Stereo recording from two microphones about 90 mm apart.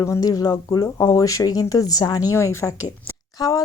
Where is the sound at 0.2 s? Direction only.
45° left (ahead or behind).